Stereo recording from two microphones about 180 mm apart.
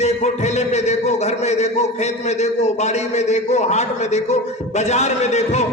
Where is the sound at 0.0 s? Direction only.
40° left (ahead or behind).